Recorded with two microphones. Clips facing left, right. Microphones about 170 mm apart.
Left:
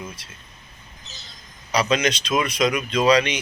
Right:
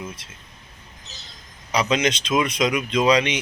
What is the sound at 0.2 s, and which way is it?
Speech, 25° right (ahead or behind).